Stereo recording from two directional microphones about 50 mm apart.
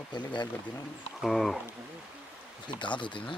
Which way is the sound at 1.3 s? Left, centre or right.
Centre.